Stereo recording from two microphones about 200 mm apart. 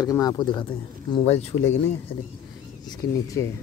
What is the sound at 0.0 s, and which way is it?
Speech, 15° left (ahead or behind).